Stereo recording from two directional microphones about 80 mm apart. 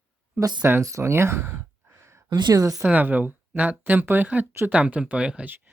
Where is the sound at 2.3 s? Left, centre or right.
Right.